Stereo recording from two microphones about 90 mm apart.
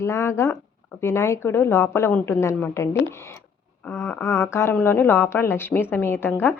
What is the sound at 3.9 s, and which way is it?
A woman's voice, 30° left (ahead or behind).